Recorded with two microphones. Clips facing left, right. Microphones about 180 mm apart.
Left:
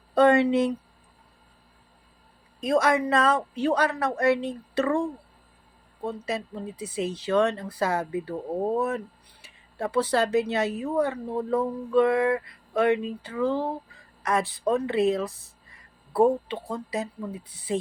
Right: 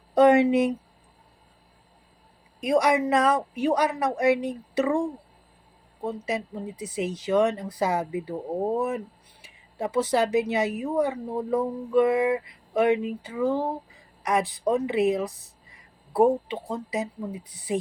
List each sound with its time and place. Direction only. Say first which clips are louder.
0.1 s speech: right 2 dB; 20° right (ahead or behind)
2.6 s speech: right 1 dB; 15° right (ahead or behind)